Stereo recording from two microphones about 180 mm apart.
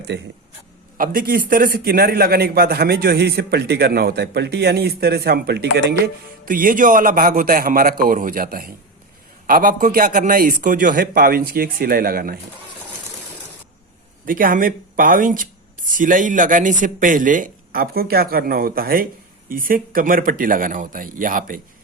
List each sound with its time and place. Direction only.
0.9 s a man's voice: 50° right (ahead or behind)
6.4 s speech: 50° right (ahead or behind)
14.3 s speech: 50° right (ahead or behind)